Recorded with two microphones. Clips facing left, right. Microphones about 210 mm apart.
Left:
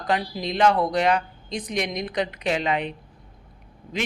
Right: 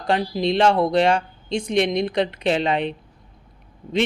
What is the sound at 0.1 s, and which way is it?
A man's voice, 25° right (ahead or behind).